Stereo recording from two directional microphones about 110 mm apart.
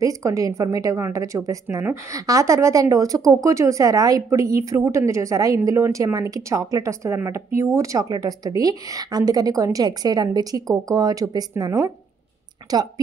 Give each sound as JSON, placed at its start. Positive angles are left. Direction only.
{"t": 0.0, "sound": "speech", "side_deg": -30}